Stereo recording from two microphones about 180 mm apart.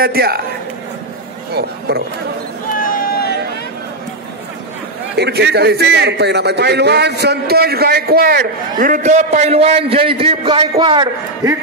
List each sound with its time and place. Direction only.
0.0 s a man's voice: 60° right (ahead or behind)
1.5 s speech: 65° right (ahead or behind)
2.8 s a sound: 55° left (ahead or behind)
5.1 s a man's voice: 65° right (ahead or behind); by 11.5 s 25° right (ahead or behind)